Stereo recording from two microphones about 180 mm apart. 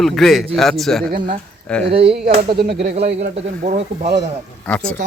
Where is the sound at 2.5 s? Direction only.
65° right (ahead or behind).